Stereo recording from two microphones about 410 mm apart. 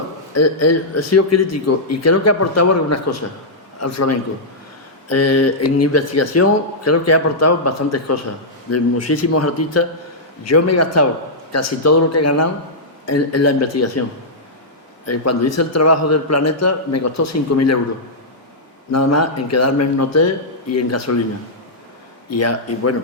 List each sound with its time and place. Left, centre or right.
0.3 s speech: left
15.0 s speech: left
18.9 s speech: left
22.4 s speech: left